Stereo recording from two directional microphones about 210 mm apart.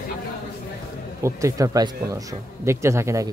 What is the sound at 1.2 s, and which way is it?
Speech, 15° right (ahead or behind).